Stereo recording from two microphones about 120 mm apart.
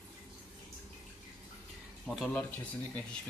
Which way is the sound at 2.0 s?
Centre (ahead or behind).